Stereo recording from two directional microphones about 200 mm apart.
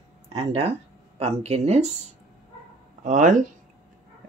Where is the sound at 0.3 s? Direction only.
30° right (ahead or behind).